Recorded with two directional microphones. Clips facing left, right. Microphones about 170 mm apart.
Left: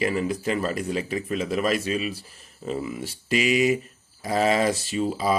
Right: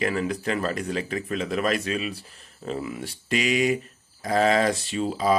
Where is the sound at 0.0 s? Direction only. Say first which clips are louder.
Left 1 dB; 5° left (ahead or behind).